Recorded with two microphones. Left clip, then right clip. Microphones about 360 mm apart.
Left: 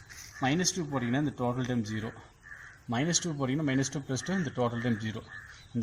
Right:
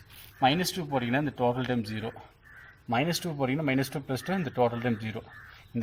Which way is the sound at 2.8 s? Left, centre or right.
Right.